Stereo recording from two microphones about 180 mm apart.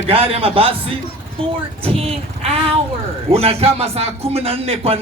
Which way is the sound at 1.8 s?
35° right (ahead or behind).